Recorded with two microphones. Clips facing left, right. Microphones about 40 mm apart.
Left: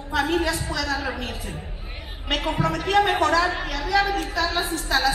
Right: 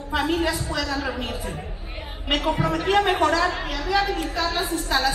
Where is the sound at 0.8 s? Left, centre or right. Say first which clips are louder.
Even; centre.